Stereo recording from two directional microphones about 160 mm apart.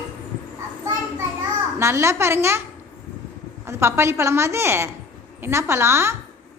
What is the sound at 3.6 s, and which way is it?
A woman's voice, 15° right (ahead or behind).